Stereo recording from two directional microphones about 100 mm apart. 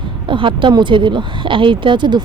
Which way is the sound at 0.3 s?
55° right (ahead or behind).